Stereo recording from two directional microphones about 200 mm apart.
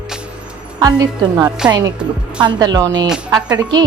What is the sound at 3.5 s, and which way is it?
Speech, 20° right (ahead or behind).